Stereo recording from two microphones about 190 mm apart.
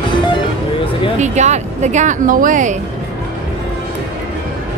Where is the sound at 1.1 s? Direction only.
40° right (ahead or behind).